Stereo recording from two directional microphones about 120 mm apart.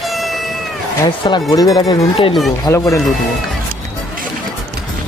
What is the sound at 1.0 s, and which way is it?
A man's voice, 40° left (ahead or behind).